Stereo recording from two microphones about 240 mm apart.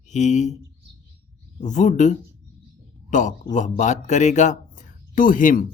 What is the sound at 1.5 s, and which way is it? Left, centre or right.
A man's voice, left.